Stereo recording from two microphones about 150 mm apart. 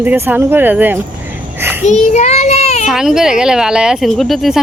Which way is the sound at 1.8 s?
50° left (ahead or behind).